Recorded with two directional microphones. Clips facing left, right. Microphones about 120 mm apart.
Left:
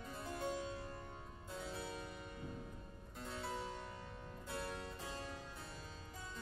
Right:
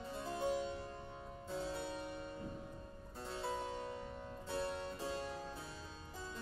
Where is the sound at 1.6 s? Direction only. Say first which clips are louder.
Right 4 dB; 30° right (ahead or behind).